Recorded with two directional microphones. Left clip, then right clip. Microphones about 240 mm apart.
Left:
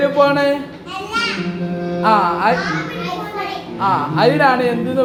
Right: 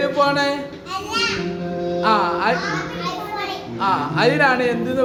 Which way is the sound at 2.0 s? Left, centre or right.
Centre.